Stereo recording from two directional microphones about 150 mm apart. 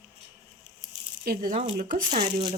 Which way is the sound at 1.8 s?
60° right (ahead or behind).